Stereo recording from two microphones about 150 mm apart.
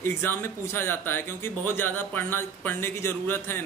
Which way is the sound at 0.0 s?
15° left (ahead or behind).